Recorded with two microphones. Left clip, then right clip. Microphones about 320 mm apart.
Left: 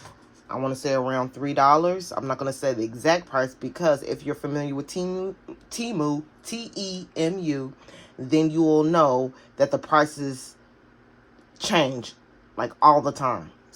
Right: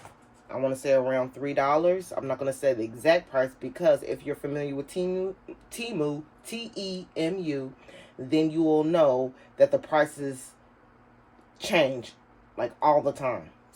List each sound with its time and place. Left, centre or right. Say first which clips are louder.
0.4 s speech: even; centre
11.5 s a man's voice: left 2 dB; centre